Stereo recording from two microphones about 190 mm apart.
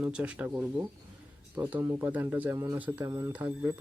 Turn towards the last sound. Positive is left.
turn(degrees=-10)  # may be behind; listen again after turning